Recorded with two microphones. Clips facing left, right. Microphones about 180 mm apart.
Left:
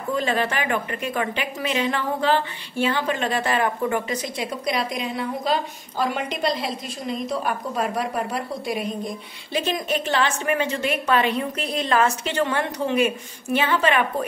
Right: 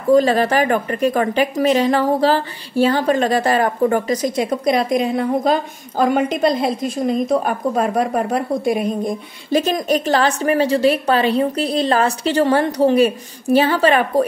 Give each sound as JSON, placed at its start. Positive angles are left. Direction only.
{"t": 0.1, "sound": "speech", "side_deg": -40}